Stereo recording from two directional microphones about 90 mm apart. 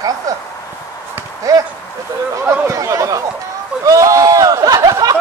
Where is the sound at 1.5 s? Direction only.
40° right (ahead or behind).